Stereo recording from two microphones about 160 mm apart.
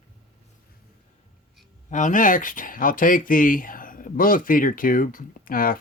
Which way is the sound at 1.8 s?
50° left (ahead or behind).